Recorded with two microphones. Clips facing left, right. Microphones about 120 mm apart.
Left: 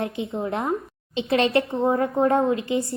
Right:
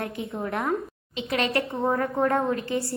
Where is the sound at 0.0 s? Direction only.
25° left (ahead or behind).